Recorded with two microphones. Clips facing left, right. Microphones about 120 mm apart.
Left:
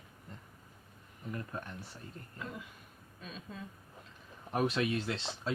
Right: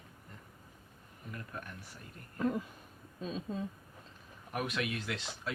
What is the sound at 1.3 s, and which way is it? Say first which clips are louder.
Speech: left 3 dB; 30° left (ahead or behind).